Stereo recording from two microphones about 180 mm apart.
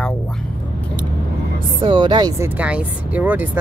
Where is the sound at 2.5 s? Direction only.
5° right (ahead or behind).